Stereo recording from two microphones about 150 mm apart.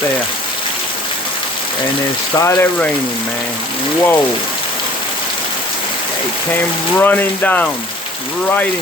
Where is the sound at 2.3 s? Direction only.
15° left (ahead or behind).